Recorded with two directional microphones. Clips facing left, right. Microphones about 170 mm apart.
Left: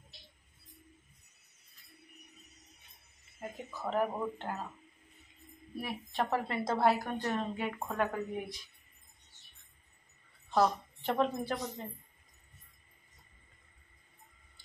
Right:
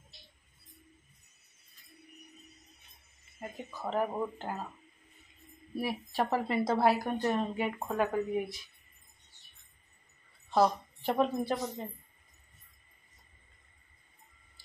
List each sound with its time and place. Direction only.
3.3 s a woman's voice: centre (ahead or behind)
5.8 s a woman's voice: 5° right (ahead or behind)
10.5 s a woman's voice: 10° right (ahead or behind)